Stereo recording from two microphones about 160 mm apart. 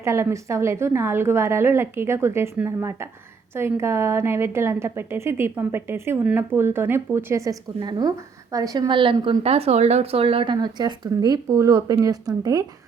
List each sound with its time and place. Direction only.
0.0 s a woman's voice: 15° right (ahead or behind)